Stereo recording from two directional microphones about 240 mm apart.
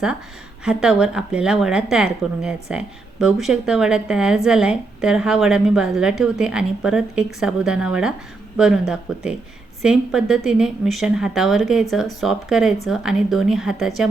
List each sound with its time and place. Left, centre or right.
0.6 s speech: centre